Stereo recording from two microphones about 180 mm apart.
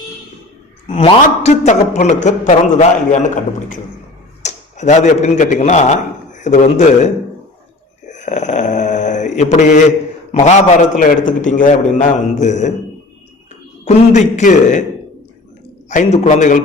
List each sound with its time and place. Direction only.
0.9 s a man's voice: 30° left (ahead or behind)
8.0 s mantra: 40° left (ahead or behind)
10.3 s a man's voice: 45° left (ahead or behind)
13.8 s a man's voice: 40° left (ahead or behind)
15.9 s a man's voice: 40° left (ahead or behind)